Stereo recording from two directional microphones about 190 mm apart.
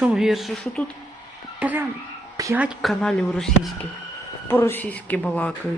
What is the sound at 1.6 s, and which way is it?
Speech, 10° right (ahead or behind).